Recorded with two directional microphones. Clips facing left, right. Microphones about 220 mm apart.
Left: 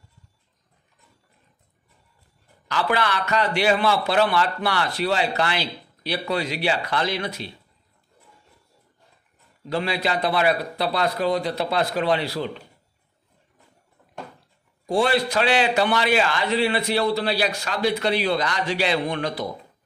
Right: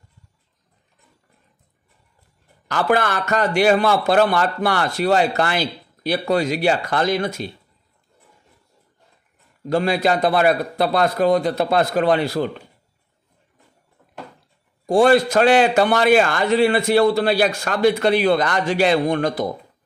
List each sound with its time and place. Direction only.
2.7 s a man's voice: 50° right (ahead or behind)
9.7 s a man's voice: 45° right (ahead or behind)
14.9 s a man's voice: 45° right (ahead or behind)